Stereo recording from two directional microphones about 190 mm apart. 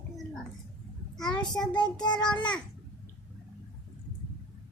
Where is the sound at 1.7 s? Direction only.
20° left (ahead or behind).